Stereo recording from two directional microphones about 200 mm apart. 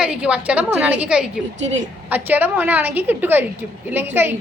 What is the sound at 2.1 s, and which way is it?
A woman's voice, 10° right (ahead or behind).